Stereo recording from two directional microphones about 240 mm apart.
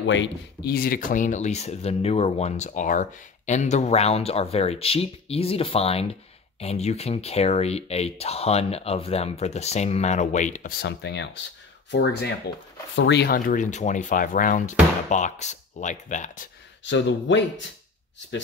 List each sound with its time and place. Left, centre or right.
0.0 s speech: left
10.8 s speech: left
16.8 s speech: left